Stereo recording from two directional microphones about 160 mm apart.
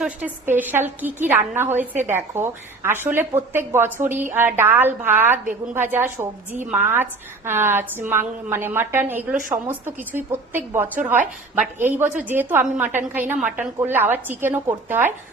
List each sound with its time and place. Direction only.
0.0 s a woman's voice: 10° right (ahead or behind)
9.3 s a woman's voice: 55° right (ahead or behind)
9.8 s a woman's voice: 15° right (ahead or behind)